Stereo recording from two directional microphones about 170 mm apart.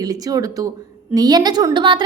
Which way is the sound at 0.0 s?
20° right (ahead or behind).